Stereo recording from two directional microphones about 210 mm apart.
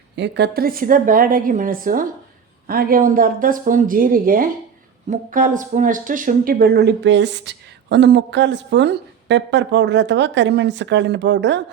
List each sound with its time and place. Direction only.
0.2 s a woman's voice: 55° right (ahead or behind)